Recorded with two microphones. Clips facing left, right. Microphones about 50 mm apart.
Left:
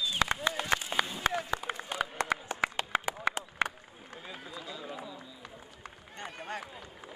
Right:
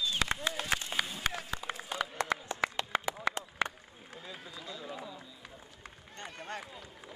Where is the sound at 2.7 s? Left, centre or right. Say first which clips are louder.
Left 2 dB; left.